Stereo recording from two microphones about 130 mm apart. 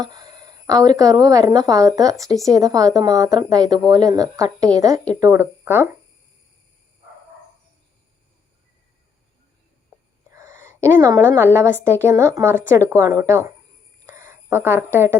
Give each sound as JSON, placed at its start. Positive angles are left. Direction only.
{"t": 0.0, "sound": "speech", "side_deg": -30}
{"t": 10.3, "sound": "speech", "side_deg": -20}
{"t": 14.1, "sound": "a sound", "side_deg": -20}